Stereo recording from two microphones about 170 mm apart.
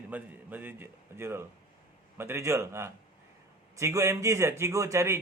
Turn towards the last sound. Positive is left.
turn(degrees=-15)  # may be behind; listen again after turning